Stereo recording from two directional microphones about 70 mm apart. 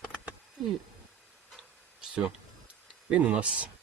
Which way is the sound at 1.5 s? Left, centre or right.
Centre.